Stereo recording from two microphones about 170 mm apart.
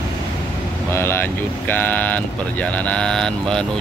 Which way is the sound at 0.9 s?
15° left (ahead or behind).